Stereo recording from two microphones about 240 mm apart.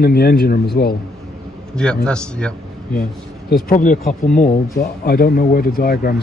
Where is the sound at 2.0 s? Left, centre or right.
Centre.